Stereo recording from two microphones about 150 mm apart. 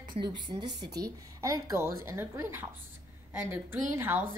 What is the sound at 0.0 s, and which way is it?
A woman's voice, 30° right (ahead or behind).